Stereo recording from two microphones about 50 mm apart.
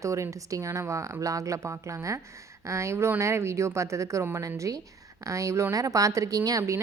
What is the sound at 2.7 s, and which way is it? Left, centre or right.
A woman's voice, right.